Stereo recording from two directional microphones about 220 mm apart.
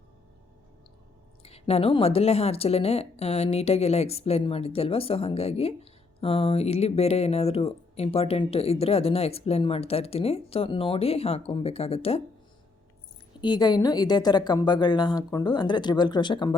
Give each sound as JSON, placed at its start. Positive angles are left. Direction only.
{"t": 1.4, "sound": "a woman's voice", "side_deg": 25}
{"t": 13.4, "sound": "a woman's voice", "side_deg": 20}